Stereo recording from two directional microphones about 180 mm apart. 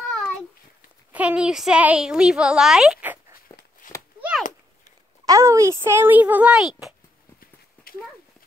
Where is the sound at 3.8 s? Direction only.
50° left (ahead or behind).